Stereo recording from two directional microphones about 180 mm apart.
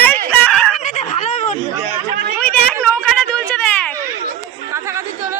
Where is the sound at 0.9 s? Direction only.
45° left (ahead or behind).